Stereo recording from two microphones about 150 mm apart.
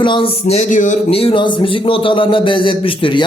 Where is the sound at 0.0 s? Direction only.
35° left (ahead or behind).